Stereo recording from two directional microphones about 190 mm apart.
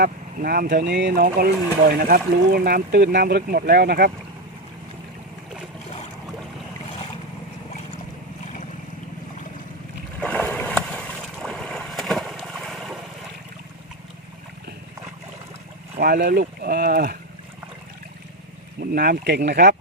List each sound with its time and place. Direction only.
0.0 s speech: 55° right (ahead or behind)
0.9 s speech: 65° right (ahead or behind)
10.2 s boat: 5° left (ahead or behind)
16.0 s speech: 60° right (ahead or behind)
18.8 s speech: 50° right (ahead or behind)